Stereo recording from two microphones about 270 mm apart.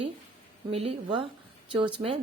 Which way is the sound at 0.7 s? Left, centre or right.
Right.